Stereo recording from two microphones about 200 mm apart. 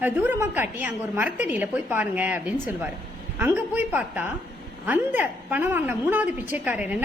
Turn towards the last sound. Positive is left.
turn(degrees=-10)  # may be behind; listen again after turning